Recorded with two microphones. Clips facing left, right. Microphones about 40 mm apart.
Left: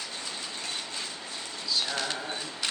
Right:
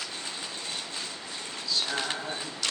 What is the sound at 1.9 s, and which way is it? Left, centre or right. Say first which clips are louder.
Bird: right 1 dB; centre.